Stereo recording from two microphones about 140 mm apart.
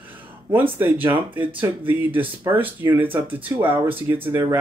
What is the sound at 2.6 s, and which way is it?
Speech, 15° right (ahead or behind).